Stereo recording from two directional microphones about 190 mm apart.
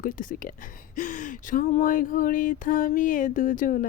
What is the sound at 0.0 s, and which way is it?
Speech, 45° left (ahead or behind).